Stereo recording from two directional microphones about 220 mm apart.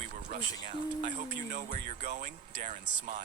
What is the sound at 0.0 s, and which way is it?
Speech, 35° right (ahead or behind).